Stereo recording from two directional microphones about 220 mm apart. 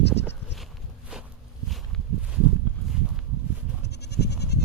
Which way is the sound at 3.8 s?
50° left (ahead or behind).